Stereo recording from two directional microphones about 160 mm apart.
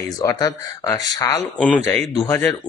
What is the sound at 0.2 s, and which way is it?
Speech, 25° left (ahead or behind).